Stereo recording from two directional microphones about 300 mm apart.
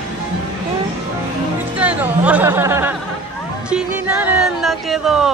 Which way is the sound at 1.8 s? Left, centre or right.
Centre.